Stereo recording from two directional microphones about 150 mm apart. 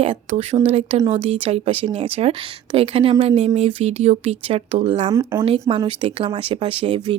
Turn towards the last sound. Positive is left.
turn(degrees=-40)  # may be behind; listen again after turning